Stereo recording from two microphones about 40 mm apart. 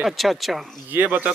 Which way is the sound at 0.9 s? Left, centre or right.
Right.